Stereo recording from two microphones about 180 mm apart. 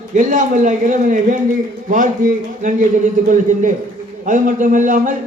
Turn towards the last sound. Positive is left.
turn(degrees=-45)  # may be behind; listen again after turning